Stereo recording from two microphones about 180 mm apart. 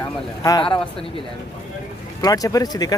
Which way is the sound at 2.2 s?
20° left (ahead or behind).